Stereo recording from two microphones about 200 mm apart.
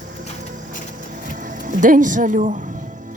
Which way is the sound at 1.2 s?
40° right (ahead or behind).